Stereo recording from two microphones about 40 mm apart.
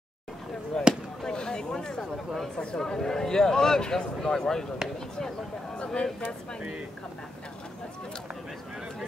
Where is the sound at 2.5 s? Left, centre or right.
Centre.